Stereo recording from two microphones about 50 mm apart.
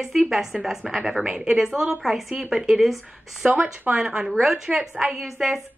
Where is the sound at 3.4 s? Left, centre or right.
Right.